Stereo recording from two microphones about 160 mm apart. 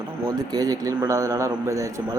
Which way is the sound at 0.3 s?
20° right (ahead or behind).